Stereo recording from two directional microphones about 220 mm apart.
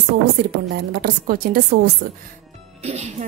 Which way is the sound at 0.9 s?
45° right (ahead or behind).